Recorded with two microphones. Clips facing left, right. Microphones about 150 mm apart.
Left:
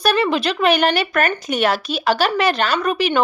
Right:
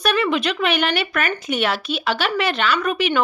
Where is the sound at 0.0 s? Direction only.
35° left (ahead or behind).